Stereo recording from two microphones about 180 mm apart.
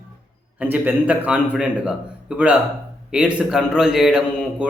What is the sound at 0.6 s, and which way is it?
A man's voice, 10° right (ahead or behind).